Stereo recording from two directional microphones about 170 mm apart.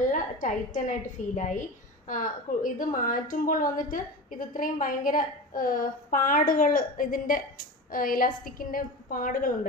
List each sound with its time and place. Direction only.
0.1 s a woman's voice: 50° left (ahead or behind)